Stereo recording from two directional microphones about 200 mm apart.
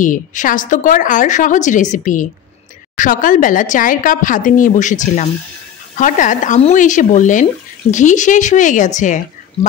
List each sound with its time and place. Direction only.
0.0 s a woman's voice: 40° left (ahead or behind)